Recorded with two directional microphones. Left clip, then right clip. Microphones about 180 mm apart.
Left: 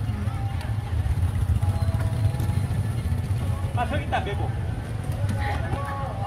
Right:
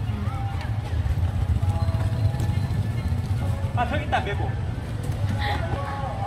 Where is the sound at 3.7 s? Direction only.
Centre (ahead or behind).